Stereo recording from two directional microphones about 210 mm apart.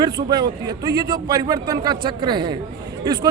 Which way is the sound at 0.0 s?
20° right (ahead or behind).